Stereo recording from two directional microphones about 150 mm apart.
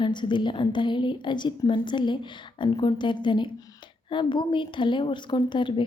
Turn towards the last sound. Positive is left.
turn(degrees=30)  # may be behind; listen again after turning